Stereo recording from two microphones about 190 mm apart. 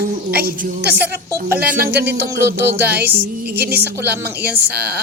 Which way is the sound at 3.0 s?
10° right (ahead or behind).